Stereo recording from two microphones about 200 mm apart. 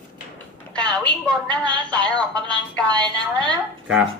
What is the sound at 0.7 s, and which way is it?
Speech, 5° left (ahead or behind).